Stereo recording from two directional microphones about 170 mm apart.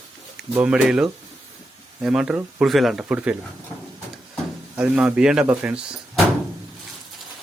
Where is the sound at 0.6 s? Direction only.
5° right (ahead or behind).